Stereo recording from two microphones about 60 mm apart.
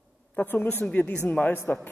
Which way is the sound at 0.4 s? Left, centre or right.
Left.